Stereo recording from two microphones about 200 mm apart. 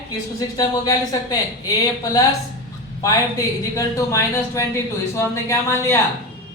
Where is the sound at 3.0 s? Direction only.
15° left (ahead or behind).